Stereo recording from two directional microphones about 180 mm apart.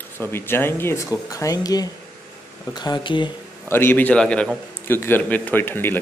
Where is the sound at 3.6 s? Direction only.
10° left (ahead or behind).